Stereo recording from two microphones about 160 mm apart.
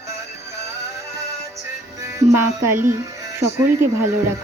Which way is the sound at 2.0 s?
15° right (ahead or behind).